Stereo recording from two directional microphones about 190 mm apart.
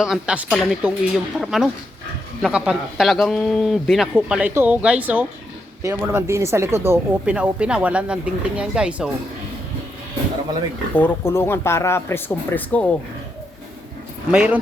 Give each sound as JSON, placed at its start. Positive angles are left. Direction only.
{"t": 0.0, "sound": "a man's voice", "side_deg": -5}
{"t": 10.9, "sound": "speech", "side_deg": 10}
{"t": 14.3, "sound": "speech", "side_deg": -5}